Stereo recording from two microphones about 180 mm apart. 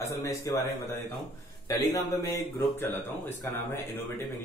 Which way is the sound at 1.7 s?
20° left (ahead or behind).